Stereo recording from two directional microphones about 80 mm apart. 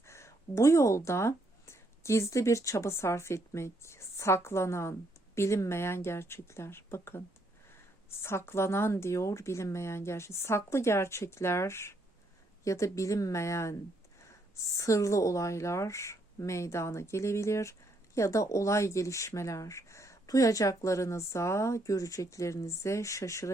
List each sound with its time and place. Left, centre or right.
0.1 s speech: left
8.2 s speech: left